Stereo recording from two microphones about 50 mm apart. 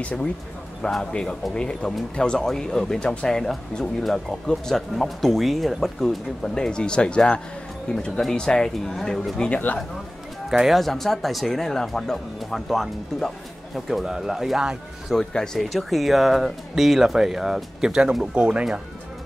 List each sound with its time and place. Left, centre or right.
0.8 s speech: centre
10.5 s speech: centre
15.1 s speech: centre
15.6 s speech: centre; by 18.7 s right